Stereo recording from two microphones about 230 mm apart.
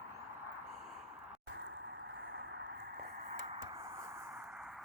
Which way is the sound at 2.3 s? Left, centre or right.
Right.